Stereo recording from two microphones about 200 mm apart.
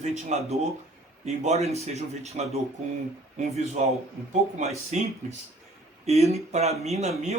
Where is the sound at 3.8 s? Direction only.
35° right (ahead or behind).